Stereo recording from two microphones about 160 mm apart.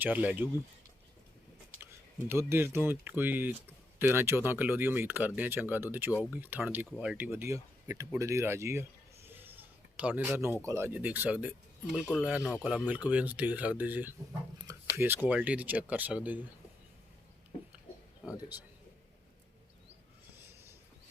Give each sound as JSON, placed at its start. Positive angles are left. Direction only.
{"t": 0.0, "sound": "speech", "side_deg": -10}
{"t": 1.8, "sound": "speech", "side_deg": -15}